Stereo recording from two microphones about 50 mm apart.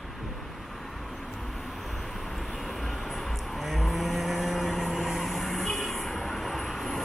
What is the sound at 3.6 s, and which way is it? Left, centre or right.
Vehicle, centre.